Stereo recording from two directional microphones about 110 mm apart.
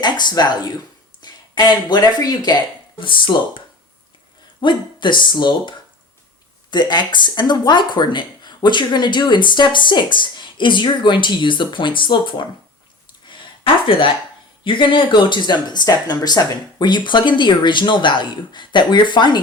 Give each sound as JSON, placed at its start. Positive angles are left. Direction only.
{"t": 0.0, "sound": "speech", "side_deg": 40}
{"t": 3.0, "sound": "speech", "side_deg": 50}
{"t": 4.6, "sound": "speech", "side_deg": 45}
{"t": 13.2, "sound": "a sound", "side_deg": 45}
{"t": 13.8, "sound": "speech", "side_deg": 50}